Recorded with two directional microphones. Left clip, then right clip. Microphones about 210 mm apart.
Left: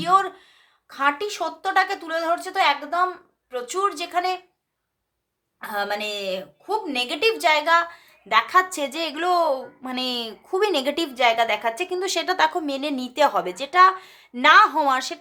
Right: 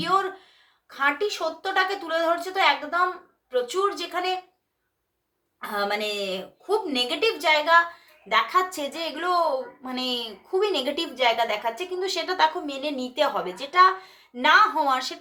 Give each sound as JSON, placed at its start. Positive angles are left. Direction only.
{"t": 0.0, "sound": "a woman's voice", "side_deg": 35}
{"t": 5.5, "sound": "a woman's voice", "side_deg": 30}